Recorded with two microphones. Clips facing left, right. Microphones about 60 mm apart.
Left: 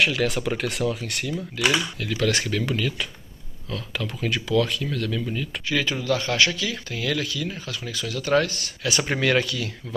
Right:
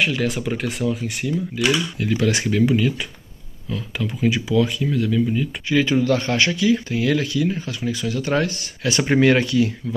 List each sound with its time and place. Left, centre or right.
0.0 s speech: centre
2.0 s speech: right